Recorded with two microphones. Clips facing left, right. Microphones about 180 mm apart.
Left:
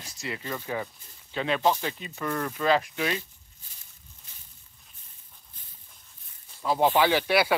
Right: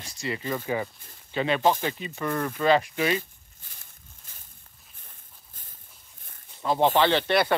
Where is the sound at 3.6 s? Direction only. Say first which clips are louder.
Right 5 dB; 55° right (ahead or behind).